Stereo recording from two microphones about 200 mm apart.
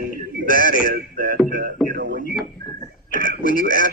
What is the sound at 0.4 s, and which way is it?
Speech, 45° left (ahead or behind).